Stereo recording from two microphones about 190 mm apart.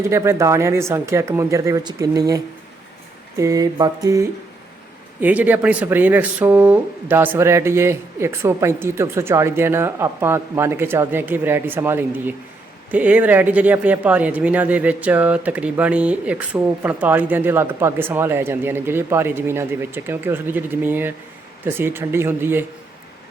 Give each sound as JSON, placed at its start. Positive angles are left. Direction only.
{"t": 0.1, "sound": "speech", "side_deg": -15}